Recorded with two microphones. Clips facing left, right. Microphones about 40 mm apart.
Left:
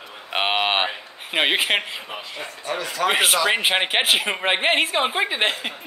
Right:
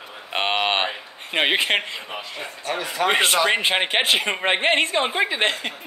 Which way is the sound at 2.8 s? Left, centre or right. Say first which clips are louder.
Right 1 dB; centre.